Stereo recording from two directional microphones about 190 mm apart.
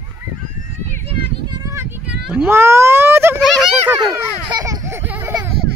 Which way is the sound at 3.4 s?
Centre (ahead or behind).